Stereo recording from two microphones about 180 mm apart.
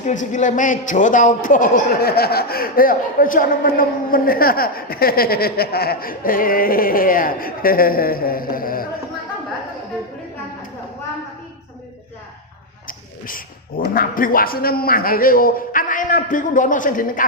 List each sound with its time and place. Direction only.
0.0 s a man's voice: 45° left (ahead or behind)
12.9 s a man's voice: 50° left (ahead or behind)